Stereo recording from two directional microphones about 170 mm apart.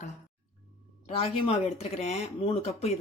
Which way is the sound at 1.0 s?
35° left (ahead or behind).